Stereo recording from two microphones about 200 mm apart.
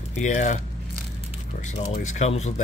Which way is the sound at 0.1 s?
35° left (ahead or behind).